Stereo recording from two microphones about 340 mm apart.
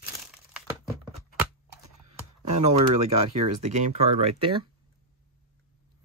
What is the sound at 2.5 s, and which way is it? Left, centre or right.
Speech, centre.